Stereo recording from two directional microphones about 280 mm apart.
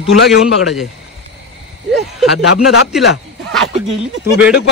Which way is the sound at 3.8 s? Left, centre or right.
Centre.